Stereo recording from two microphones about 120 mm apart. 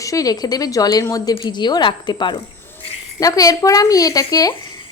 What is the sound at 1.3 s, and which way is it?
Speech, 40° left (ahead or behind).